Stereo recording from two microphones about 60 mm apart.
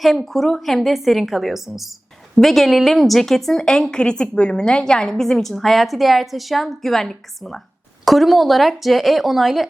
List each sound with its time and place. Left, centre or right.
0.0 s a woman's voice: centre